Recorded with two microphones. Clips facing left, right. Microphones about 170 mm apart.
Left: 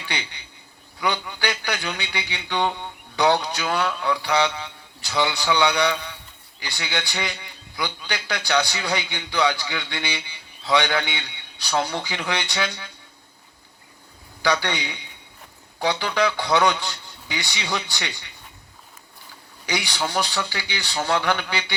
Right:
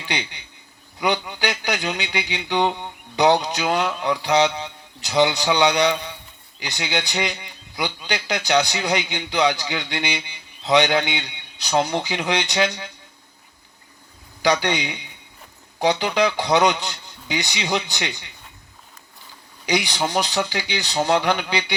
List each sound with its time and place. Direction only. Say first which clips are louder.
0.0 s a man's voice: right 4 dB; 15° right (ahead or behind)
14.4 s a man's voice: right 3 dB; 15° right (ahead or behind)
19.6 s a man's voice: right 4 dB; 15° right (ahead or behind)